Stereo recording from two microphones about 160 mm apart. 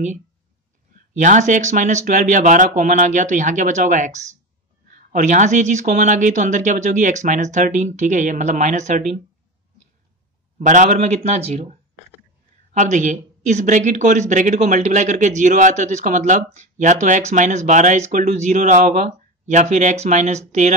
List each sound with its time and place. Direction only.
1.1 s speech: 50° right (ahead or behind)
10.6 s speech: 50° right (ahead or behind)